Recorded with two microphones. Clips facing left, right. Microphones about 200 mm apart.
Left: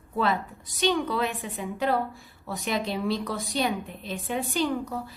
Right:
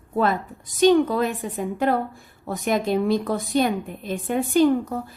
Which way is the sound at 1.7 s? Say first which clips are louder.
Right 3 dB; 50° right (ahead or behind).